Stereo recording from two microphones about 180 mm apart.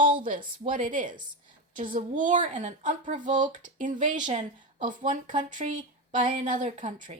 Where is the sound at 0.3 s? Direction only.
45° right (ahead or behind).